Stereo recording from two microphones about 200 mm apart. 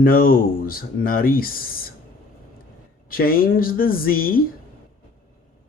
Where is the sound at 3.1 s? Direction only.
45° left (ahead or behind).